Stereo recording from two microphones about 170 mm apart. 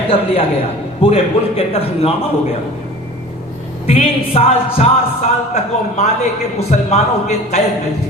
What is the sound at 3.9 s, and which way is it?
A man's voice, 35° left (ahead or behind).